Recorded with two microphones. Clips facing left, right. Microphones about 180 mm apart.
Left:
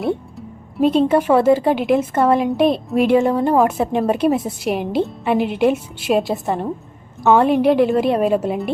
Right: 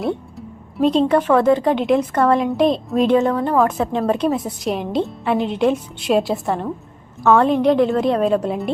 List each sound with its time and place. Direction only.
0.0 s a woman's voice: centre (ahead or behind)